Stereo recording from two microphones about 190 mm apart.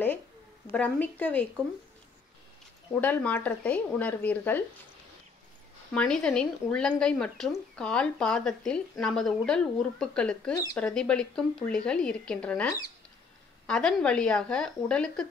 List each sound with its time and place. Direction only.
0.7 s speech: 10° left (ahead or behind)
2.9 s speech: 10° left (ahead or behind)
5.9 s speech: 5° left (ahead or behind)
10.5 s speech: 15° left (ahead or behind)
10.8 s speech: 5° left (ahead or behind)